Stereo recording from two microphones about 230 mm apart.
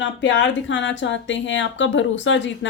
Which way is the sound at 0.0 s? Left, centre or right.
Left.